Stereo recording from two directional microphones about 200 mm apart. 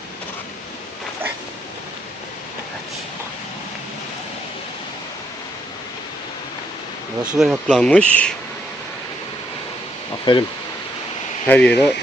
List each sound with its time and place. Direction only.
7.2 s speech: 5° right (ahead or behind)
10.3 s speech: 25° left (ahead or behind)
11.4 s speech: 10° left (ahead or behind)